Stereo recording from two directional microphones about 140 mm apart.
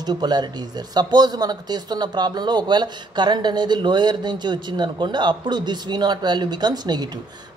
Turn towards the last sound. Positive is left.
turn(degrees=-30)  # may be behind; listen again after turning